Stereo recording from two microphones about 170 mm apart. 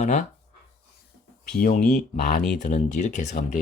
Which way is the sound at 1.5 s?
55° left (ahead or behind).